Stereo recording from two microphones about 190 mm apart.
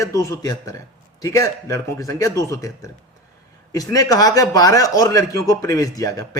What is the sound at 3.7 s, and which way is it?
A man's voice, 20° left (ahead or behind).